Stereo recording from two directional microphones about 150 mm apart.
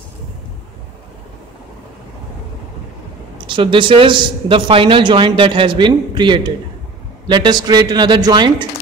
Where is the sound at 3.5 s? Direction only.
35° right (ahead or behind).